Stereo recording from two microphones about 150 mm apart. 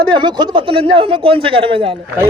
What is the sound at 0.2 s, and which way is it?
A man's voice, 30° right (ahead or behind).